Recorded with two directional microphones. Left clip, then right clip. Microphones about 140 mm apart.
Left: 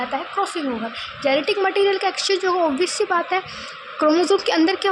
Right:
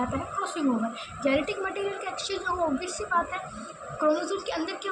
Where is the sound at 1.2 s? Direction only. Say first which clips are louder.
Left 8 dB; 25° left (ahead or behind); by 4.8 s 40° left (ahead or behind).